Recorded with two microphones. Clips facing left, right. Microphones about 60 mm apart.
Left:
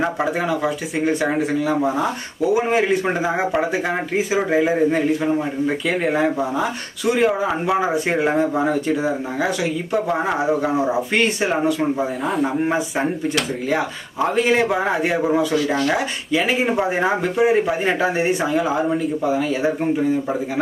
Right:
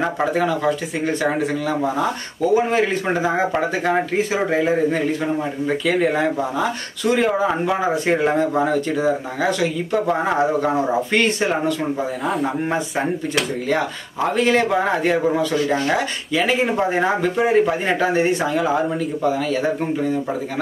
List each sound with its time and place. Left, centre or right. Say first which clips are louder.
0.0 s speech: right 1 dB; centre
12.3 s speech: left 1 dB; centre